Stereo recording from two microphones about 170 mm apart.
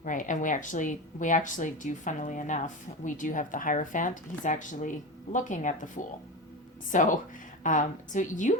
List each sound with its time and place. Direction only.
0.0 s speech: 50° left (ahead or behind)
6.9 s speech: 50° left (ahead or behind)